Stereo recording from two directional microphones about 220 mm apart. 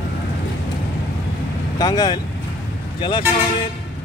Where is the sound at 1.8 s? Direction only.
15° left (ahead or behind).